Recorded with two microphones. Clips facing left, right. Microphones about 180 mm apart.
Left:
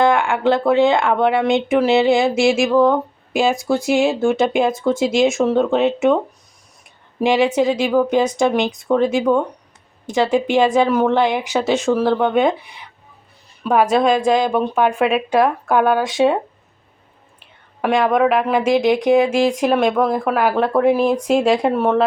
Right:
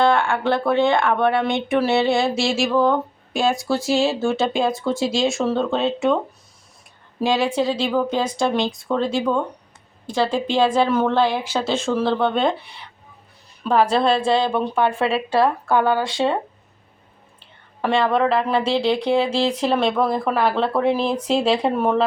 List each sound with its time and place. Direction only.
0.0 s speech: 15° left (ahead or behind)
3.8 s a woman's voice: 15° left (ahead or behind)
7.2 s a woman's voice: 20° left (ahead or behind)
17.4 s a woman's voice: 15° left (ahead or behind)